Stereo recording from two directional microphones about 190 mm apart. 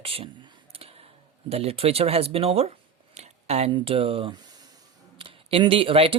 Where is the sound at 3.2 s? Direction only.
35° right (ahead or behind).